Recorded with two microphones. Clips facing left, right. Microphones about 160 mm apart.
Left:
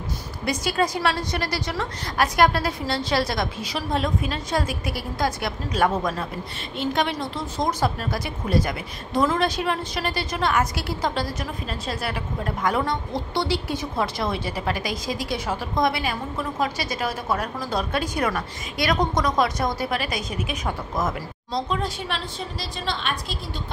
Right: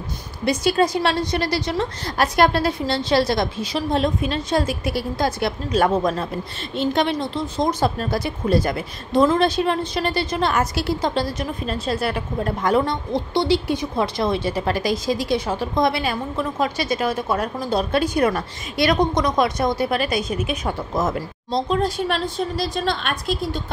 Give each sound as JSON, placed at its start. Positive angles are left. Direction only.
{"t": 0.5, "sound": "speech", "side_deg": -25}
{"t": 21.7, "sound": "a woman's voice", "side_deg": -40}